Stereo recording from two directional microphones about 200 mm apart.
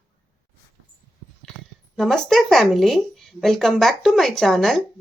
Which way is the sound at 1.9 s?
Centre (ahead or behind).